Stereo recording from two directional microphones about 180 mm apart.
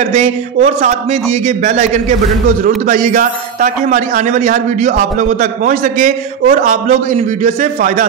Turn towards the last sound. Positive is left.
turn(degrees=-45)  # may be behind; listen again after turning